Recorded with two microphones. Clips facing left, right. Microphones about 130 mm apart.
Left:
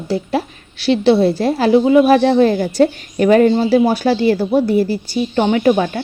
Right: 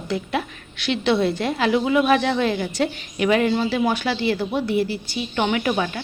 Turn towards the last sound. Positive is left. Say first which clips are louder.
# left 8 dB
turn(degrees=40)  # may be behind; listen again after turning